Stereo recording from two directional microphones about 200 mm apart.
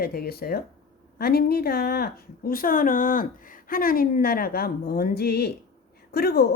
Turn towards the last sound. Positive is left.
turn(degrees=50)  # may be behind; listen again after turning